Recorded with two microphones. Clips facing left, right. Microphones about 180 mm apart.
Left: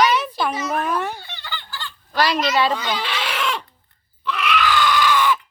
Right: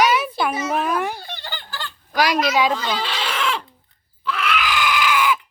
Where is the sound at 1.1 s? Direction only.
40° right (ahead or behind).